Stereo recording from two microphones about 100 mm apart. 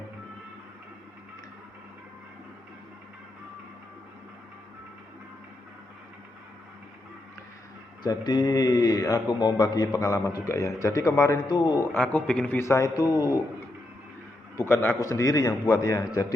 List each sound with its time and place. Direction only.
8.0 s a man's voice: 45° left (ahead or behind)
11.4 s a man's voice: 45° left (ahead or behind)
11.9 s a man's voice: 15° left (ahead or behind)
12.5 s a man's voice: 30° left (ahead or behind)
13.1 s speech: 20° right (ahead or behind)
14.7 s a man's voice: 20° left (ahead or behind)
15.0 s a man's voice: 30° left (ahead or behind)